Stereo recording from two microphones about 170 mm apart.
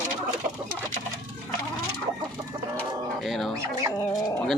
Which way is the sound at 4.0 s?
20° left (ahead or behind).